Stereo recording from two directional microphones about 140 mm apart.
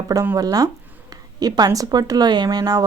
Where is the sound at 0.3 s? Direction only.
25° right (ahead or behind).